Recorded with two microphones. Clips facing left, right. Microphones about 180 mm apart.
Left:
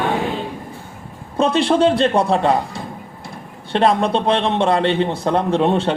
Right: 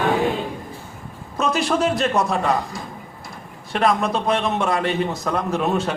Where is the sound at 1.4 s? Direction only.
30° left (ahead or behind).